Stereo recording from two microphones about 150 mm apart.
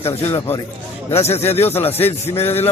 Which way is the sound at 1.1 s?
45° left (ahead or behind).